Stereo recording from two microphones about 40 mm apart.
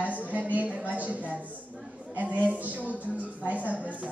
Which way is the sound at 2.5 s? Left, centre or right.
Right.